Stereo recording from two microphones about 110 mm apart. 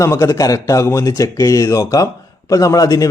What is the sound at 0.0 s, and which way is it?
Speech, 25° left (ahead or behind).